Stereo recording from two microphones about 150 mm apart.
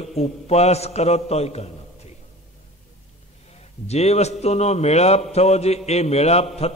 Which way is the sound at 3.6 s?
45° left (ahead or behind).